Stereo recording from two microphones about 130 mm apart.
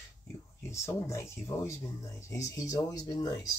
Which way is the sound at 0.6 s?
20° left (ahead or behind).